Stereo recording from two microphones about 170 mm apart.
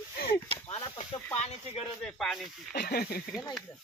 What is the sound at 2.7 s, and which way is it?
Speech, 70° left (ahead or behind).